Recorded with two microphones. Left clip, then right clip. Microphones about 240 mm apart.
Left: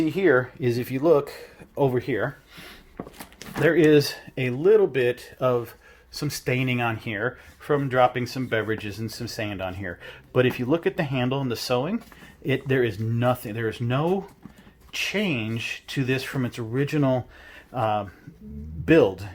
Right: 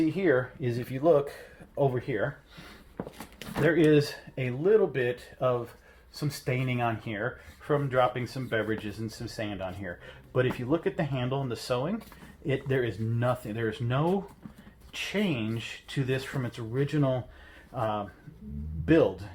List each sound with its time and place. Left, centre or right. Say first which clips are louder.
0.0 s speech: left 5 dB; left
3.8 s speech: left 5 dB; left